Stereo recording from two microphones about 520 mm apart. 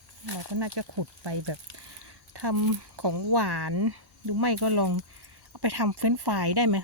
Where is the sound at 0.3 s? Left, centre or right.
Right.